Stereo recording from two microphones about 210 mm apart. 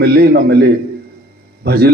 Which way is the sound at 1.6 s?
50° right (ahead or behind).